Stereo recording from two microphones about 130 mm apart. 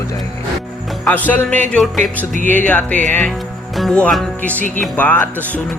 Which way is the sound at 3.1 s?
5° left (ahead or behind).